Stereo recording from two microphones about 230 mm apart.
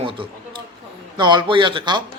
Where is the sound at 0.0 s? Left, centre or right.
Right.